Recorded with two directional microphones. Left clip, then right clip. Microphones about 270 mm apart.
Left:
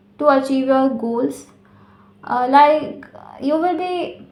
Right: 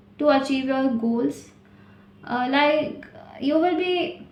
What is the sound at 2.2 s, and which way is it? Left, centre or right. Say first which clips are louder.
A woman's voice: left 9 dB; centre.